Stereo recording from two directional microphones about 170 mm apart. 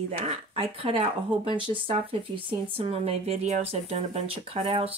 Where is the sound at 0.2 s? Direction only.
40° right (ahead or behind).